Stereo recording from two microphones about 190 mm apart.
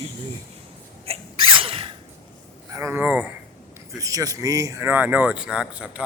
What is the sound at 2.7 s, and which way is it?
Speech, 15° right (ahead or behind).